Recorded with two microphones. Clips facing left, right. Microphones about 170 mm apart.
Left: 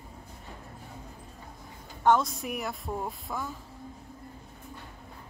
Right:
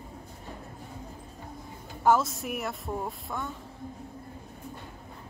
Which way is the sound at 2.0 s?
5° right (ahead or behind).